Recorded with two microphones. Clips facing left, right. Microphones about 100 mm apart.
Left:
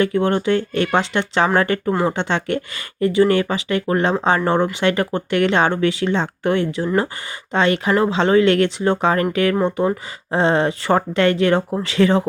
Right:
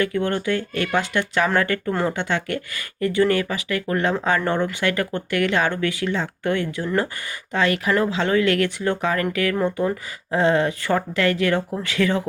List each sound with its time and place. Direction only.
0.0 s speech: 25° left (ahead or behind)
1.9 s speech: 15° left (ahead or behind)
2.1 s speech: 25° left (ahead or behind)